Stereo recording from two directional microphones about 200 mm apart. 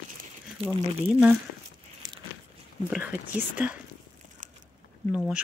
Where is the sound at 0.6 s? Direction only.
25° right (ahead or behind).